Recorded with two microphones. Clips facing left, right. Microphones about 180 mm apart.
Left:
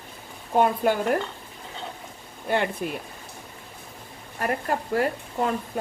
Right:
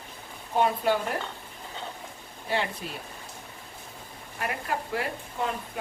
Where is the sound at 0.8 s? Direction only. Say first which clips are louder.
Left 2 dB; 50° left (ahead or behind).